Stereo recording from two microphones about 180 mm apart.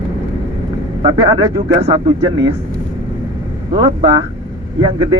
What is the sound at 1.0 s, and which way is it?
Speech, 25° right (ahead or behind).